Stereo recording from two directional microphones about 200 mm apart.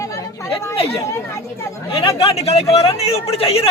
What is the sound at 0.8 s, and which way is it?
Speech, 30° left (ahead or behind).